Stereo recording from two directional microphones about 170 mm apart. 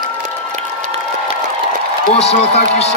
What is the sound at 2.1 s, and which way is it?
Speech, 40° left (ahead or behind).